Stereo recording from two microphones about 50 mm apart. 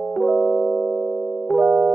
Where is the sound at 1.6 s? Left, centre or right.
Centre.